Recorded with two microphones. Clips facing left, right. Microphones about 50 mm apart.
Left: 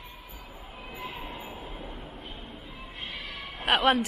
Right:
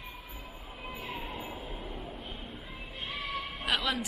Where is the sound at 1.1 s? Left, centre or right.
Left.